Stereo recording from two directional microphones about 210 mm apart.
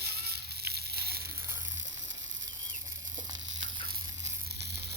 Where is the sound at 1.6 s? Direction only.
65° right (ahead or behind).